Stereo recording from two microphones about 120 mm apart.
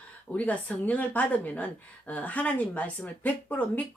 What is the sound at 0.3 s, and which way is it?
A woman's voice, 10° left (ahead or behind).